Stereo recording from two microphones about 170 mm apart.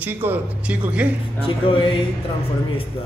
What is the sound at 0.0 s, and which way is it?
Speech, 10° right (ahead or behind).